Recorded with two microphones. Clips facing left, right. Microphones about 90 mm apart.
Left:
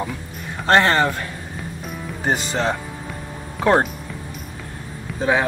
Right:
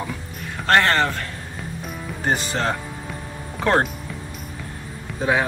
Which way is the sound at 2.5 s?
10° left (ahead or behind).